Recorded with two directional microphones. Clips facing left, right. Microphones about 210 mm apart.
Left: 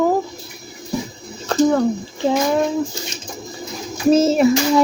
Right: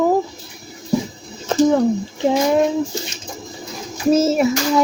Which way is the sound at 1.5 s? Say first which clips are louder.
Right 1 dB; 20° right (ahead or behind).